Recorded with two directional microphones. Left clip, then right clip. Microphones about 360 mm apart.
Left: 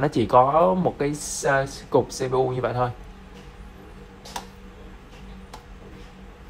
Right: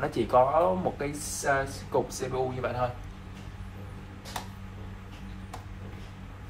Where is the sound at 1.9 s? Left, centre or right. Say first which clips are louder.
Left 8 dB; left.